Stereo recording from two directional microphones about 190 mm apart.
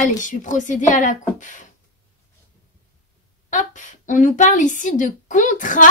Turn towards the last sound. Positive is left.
turn(degrees=45)  # may be behind; listen again after turning